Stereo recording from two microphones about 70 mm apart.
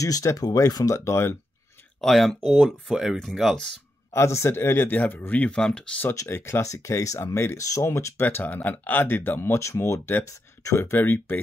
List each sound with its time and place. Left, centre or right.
0.0 s speech: left
0.9 s speech: left
2.0 s speech: centre
4.1 s speech: left
5.6 s speech: centre
6.2 s speech: left
6.6 s speech: left
7.8 s speech: left
10.8 s speech: left